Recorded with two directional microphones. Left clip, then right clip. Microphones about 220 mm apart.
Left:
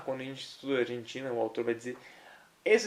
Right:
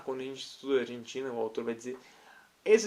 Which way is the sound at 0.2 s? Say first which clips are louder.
Right 1 dB; 30° right (ahead or behind).